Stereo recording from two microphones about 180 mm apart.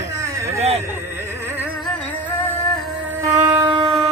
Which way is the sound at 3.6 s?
25° right (ahead or behind).